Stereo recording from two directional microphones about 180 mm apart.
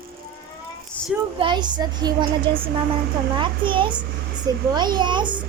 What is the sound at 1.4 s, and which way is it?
A child's voice, 25° right (ahead or behind).